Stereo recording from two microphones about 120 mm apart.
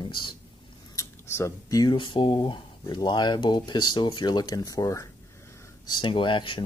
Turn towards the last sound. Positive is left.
turn(degrees=45)  # may be behind; listen again after turning